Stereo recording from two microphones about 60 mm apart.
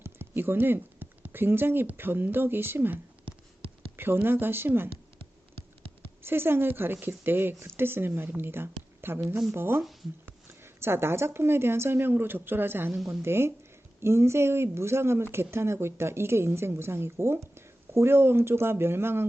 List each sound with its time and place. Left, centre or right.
0.0 s a woman's voice: right
6.2 s a woman's voice: right